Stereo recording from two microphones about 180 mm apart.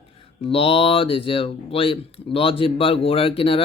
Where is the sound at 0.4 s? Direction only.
30° left (ahead or behind).